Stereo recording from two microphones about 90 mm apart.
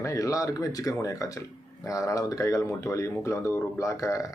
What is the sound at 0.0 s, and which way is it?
A man's voice, 35° left (ahead or behind).